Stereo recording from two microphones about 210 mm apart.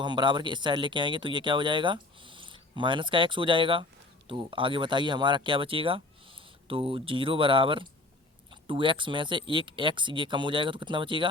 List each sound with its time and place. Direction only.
0.0 s speech: 20° right (ahead or behind)